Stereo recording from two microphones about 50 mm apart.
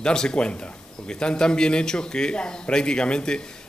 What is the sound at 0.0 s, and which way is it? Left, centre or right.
A man's voice, centre.